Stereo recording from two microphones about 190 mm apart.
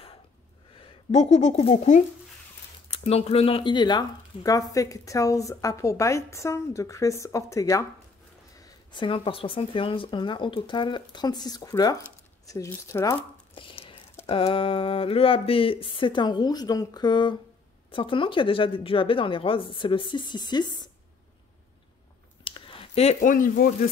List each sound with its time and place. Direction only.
0.7 s speech: 35° left (ahead or behind); by 7.8 s 15° left (ahead or behind)
8.9 s speech: 25° left (ahead or behind)
13.6 s whispering: 25° left (ahead or behind)
14.2 s speech: 30° left (ahead or behind)
22.4 s a sound: 25° left (ahead or behind); by 23.9 s 45° left (ahead or behind)